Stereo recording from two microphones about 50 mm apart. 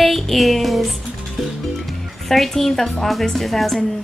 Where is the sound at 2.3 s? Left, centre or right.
Centre.